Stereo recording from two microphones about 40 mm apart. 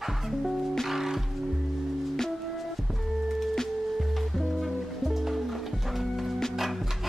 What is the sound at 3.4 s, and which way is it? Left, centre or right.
Music, centre.